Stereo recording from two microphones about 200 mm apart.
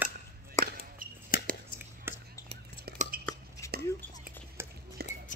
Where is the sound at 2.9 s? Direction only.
35° right (ahead or behind).